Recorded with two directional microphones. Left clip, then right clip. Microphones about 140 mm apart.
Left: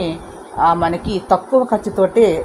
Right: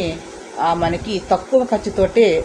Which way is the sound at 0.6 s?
35° left (ahead or behind).